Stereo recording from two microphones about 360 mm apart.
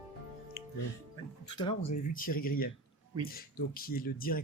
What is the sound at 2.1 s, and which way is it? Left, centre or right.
Speech, left.